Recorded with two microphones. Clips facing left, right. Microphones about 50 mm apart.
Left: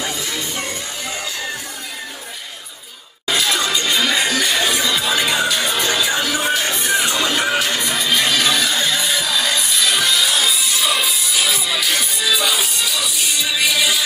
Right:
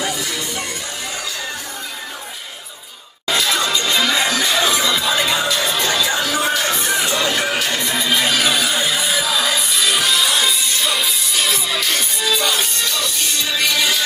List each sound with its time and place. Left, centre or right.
3.3 s music: centre
6.9 s music: centre
7.9 s music: centre